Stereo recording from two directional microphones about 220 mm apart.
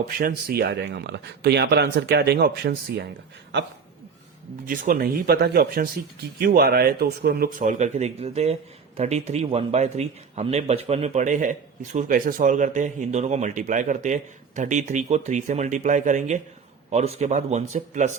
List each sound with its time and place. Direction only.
0.2 s speech: 45° right (ahead or behind)
4.6 s speech: 40° right (ahead or behind)